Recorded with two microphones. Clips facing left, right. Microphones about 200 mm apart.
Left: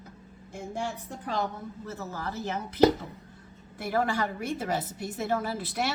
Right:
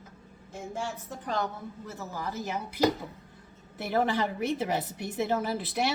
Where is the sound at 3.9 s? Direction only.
20° right (ahead or behind).